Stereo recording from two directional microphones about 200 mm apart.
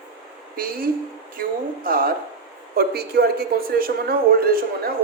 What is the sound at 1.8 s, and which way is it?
Speech, 45° right (ahead or behind).